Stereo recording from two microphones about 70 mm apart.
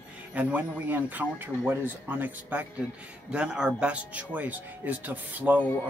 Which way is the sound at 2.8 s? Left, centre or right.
Centre.